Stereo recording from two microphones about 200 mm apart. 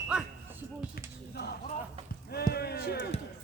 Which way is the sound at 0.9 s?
55° left (ahead or behind).